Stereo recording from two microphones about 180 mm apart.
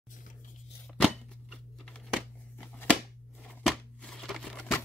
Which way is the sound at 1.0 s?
Centre (ahead or behind).